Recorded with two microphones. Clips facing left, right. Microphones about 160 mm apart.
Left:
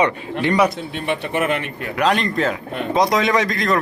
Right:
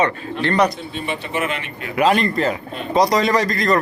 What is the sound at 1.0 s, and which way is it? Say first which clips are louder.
Speech: left 3 dB; 55° left (ahead or behind).